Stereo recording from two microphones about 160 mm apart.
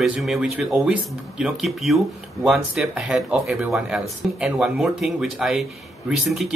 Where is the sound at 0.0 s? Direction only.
Centre (ahead or behind).